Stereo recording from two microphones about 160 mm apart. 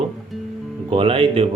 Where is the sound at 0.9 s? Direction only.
35° right (ahead or behind).